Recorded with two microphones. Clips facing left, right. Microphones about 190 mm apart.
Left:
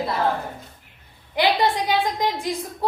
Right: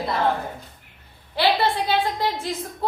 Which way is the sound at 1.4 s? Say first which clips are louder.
Left 1 dB; 15° left (ahead or behind).